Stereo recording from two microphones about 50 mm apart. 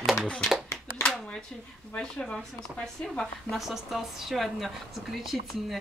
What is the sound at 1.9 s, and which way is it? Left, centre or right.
Speech, centre.